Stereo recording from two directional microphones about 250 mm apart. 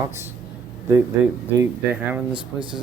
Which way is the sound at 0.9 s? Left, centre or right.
Centre.